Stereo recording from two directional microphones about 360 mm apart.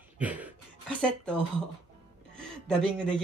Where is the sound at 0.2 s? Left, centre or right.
Centre.